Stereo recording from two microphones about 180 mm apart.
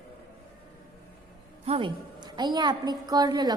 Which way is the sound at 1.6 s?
30° right (ahead or behind).